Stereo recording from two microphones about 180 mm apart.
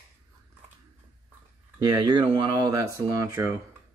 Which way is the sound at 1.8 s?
25° right (ahead or behind).